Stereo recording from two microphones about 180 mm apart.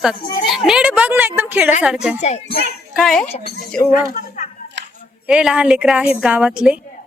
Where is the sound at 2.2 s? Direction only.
40° left (ahead or behind).